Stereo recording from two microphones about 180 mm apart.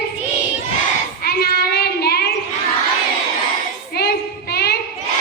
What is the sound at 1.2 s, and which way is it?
Child singing, 60° left (ahead or behind).